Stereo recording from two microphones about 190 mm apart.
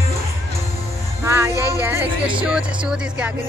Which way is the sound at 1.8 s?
10° right (ahead or behind).